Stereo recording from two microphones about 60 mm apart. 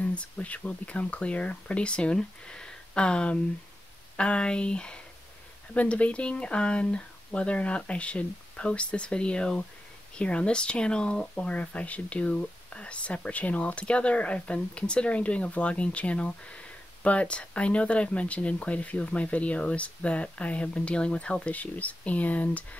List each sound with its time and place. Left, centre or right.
0.0 s speech: left